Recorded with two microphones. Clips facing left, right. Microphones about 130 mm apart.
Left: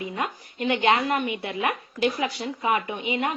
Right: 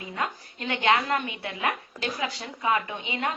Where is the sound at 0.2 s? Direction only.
25° left (ahead or behind).